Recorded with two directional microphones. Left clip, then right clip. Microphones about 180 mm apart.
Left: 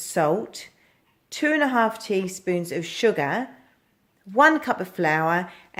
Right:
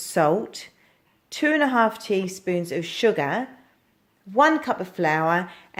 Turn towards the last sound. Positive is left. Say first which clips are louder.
# right 1 dB
turn(degrees=-10)  # may be behind; listen again after turning